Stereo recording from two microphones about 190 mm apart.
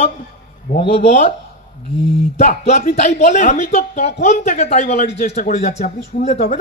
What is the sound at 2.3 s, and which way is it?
A man's voice, 35° left (ahead or behind).